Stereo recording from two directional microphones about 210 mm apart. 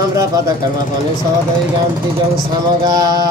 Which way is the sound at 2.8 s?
20° right (ahead or behind).